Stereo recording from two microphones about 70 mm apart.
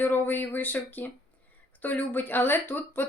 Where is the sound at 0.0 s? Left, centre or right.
Left.